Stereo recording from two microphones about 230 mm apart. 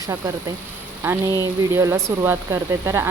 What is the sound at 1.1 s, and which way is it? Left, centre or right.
Speech, centre.